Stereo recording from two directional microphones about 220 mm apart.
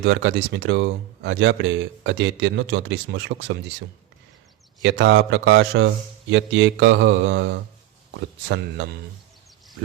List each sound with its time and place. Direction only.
0.0 s speech: 55° right (ahead or behind)
4.8 s mantra: 55° right (ahead or behind)